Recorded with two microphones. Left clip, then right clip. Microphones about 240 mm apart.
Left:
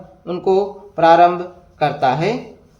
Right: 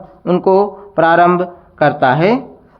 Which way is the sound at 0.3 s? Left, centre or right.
Right.